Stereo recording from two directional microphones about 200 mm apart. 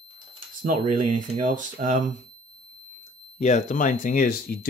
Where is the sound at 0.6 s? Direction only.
40° right (ahead or behind).